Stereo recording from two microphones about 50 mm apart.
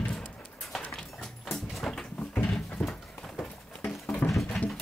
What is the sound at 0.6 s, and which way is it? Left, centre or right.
Dog, centre.